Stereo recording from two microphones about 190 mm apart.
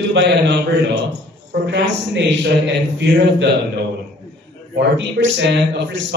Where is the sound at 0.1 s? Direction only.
65° right (ahead or behind).